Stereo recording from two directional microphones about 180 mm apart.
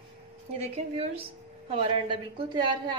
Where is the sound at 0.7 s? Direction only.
35° right (ahead or behind).